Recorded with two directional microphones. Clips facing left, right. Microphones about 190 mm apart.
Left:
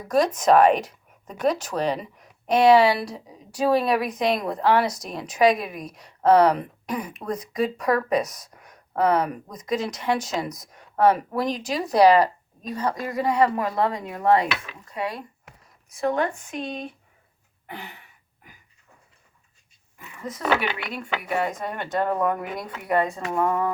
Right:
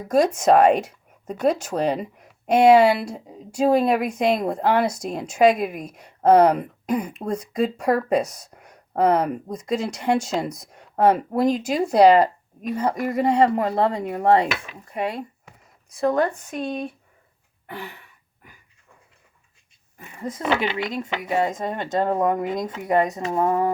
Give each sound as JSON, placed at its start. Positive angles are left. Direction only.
{"t": 0.0, "sound": "speech", "side_deg": -25}
{"t": 6.2, "sound": "speech", "side_deg": -55}
{"t": 6.9, "sound": "speech", "side_deg": -25}
{"t": 16.0, "sound": "speech", "side_deg": -40}
{"t": 20.1, "sound": "speech", "side_deg": -30}